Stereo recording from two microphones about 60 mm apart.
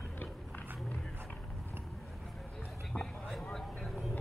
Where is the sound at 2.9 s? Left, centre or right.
Centre.